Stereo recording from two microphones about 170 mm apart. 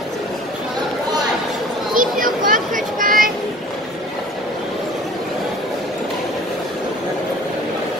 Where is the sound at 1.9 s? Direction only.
55° right (ahead or behind).